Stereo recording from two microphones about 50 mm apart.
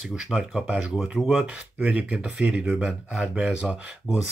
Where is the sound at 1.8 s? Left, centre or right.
Right.